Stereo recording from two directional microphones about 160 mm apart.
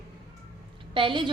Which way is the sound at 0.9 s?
30° right (ahead or behind).